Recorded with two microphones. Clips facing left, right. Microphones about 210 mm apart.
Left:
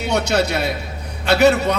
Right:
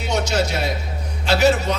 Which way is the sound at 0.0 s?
60° left (ahead or behind).